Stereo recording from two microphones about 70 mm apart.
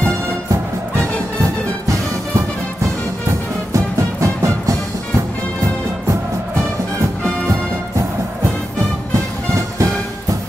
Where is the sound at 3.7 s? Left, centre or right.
Right.